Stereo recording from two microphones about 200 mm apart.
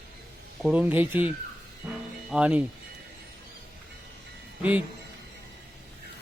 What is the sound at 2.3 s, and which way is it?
Speech, 5° right (ahead or behind).